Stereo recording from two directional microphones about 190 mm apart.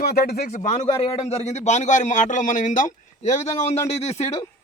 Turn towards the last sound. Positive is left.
turn(degrees=35)  # may be behind; listen again after turning